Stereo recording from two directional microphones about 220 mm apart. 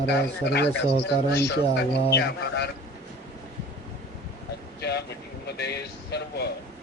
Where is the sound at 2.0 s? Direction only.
50° left (ahead or behind).